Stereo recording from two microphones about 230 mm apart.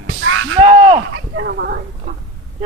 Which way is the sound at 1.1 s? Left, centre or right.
Right.